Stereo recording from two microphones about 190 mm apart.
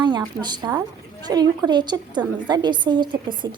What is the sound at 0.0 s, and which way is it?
A woman's voice, 25° right (ahead or behind).